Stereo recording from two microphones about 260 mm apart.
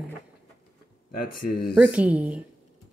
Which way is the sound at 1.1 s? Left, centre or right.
Left.